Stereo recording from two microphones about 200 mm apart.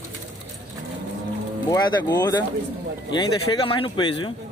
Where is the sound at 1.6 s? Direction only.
20° left (ahead or behind).